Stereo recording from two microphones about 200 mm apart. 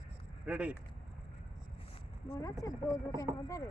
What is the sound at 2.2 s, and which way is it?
Speech, 15° left (ahead or behind).